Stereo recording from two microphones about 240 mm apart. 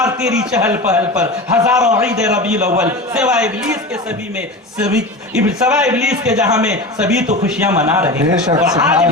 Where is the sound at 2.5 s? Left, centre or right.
Right.